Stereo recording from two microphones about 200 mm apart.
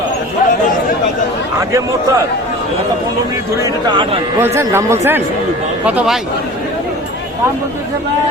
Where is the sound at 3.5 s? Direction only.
20° right (ahead or behind).